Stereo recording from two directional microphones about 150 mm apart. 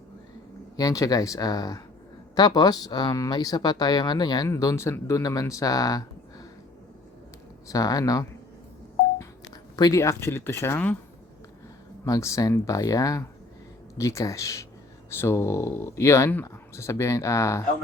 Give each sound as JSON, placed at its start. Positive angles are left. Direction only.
{"t": 0.8, "sound": "speech", "side_deg": 25}
{"t": 7.7, "sound": "speech", "side_deg": 25}
{"t": 9.7, "sound": "speech", "side_deg": 25}
{"t": 12.0, "sound": "speech", "side_deg": 20}